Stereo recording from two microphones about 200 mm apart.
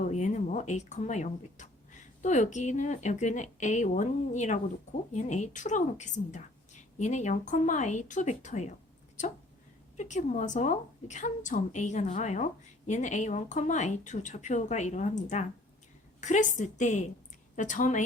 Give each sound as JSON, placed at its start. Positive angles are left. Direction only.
{"t": 0.0, "sound": "speech", "side_deg": 35}